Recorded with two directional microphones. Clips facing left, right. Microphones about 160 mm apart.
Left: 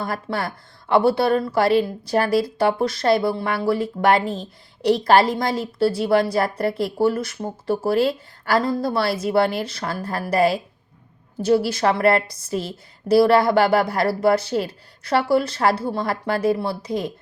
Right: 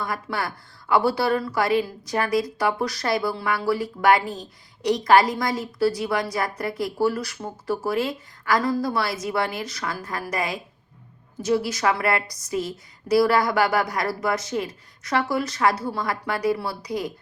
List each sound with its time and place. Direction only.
0.0 s a woman's voice: 25° left (ahead or behind)